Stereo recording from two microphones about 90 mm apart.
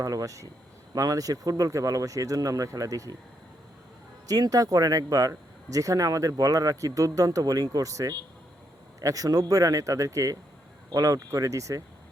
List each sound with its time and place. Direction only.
0.0 s speech: 40° right (ahead or behind)
4.3 s speech: 40° right (ahead or behind)